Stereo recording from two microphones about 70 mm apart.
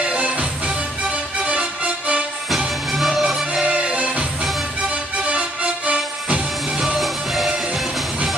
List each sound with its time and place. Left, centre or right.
0.0 s music: centre
2.9 s music: centre
3.6 s music: centre
7.0 s music: centre